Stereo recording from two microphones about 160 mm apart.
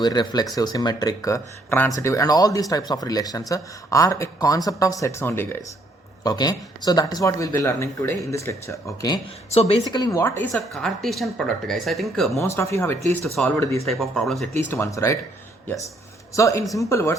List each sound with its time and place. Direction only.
0.0 s speech: 25° left (ahead or behind)
6.2 s speech: 25° left (ahead or behind)
9.5 s speech: 40° left (ahead or behind)
9.9 s speech: 25° left (ahead or behind)
10.5 s speech: centre (ahead or behind)
12.4 s speech: 15° left (ahead or behind)
13.8 s speech: centre (ahead or behind)
14.7 s speech: 20° left (ahead or behind)
16.3 s speech: 20° left (ahead or behind)